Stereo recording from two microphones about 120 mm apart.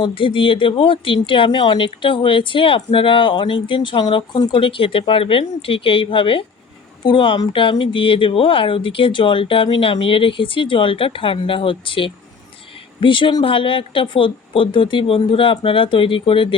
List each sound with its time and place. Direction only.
0.0 s speech: 45° left (ahead or behind)